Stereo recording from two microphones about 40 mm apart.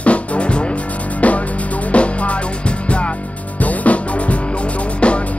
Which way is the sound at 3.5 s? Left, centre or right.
Left.